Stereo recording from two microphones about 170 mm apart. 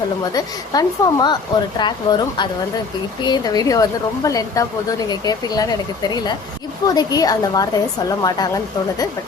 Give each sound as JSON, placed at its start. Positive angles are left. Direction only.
{"t": 0.3, "sound": "a woman's voice", "side_deg": 20}